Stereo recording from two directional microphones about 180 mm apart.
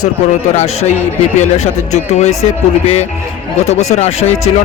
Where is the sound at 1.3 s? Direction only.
40° left (ahead or behind).